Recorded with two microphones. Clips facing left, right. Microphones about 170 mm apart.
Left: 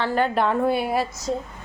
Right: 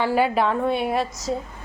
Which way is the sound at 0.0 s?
10° right (ahead or behind).